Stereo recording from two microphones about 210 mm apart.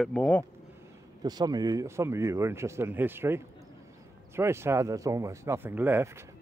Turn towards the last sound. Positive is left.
turn(degrees=-10)  # may be behind; listen again after turning